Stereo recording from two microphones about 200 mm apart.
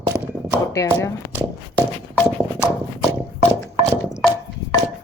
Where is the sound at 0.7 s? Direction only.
15° left (ahead or behind).